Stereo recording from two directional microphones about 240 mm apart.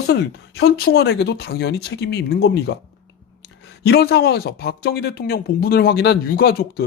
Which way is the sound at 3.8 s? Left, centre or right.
Left.